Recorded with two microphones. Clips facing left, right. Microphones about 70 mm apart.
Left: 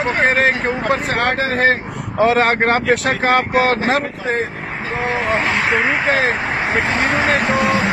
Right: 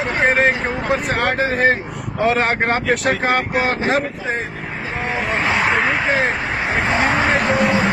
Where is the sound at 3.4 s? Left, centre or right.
Left.